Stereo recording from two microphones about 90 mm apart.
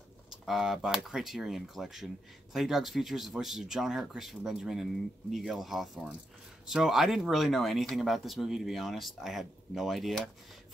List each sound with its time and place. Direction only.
0.3 s speech: 5° right (ahead or behind)